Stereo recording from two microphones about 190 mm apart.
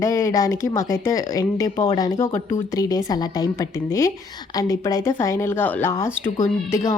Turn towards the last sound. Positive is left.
turn(degrees=15)  # may be behind; listen again after turning